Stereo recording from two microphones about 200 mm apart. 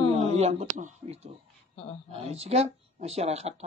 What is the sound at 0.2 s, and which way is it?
Speech, 30° right (ahead or behind).